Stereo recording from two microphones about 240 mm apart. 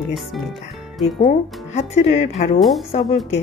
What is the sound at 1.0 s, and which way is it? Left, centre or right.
Speech, left.